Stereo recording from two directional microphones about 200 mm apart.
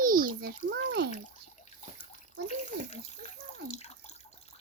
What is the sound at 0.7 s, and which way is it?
Speech, 55° right (ahead or behind).